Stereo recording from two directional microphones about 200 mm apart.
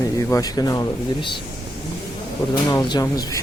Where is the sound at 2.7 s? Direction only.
20° left (ahead or behind).